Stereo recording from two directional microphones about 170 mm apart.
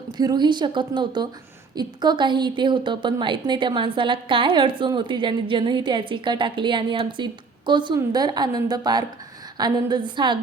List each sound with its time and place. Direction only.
0.2 s a woman's voice: 25° right (ahead or behind)